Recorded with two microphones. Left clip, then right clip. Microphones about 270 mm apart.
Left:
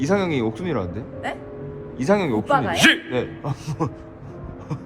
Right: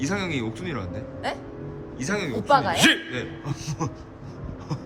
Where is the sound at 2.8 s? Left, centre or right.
Centre.